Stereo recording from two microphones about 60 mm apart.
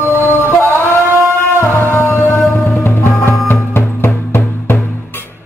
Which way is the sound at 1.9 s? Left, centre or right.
Left.